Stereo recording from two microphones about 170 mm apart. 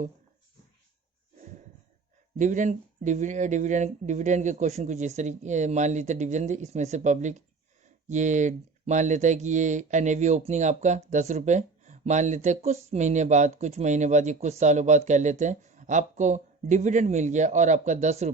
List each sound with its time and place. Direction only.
2.4 s speech: 45° right (ahead or behind)